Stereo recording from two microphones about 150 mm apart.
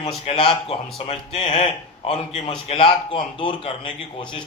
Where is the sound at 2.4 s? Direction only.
35° left (ahead or behind).